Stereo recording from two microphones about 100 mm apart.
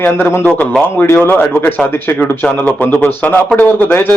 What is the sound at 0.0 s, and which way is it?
A man's voice, 20° left (ahead or behind).